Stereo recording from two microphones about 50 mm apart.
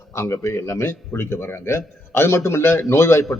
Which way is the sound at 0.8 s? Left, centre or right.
Left.